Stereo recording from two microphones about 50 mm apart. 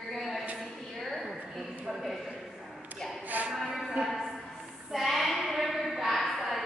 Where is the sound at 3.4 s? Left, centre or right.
Right.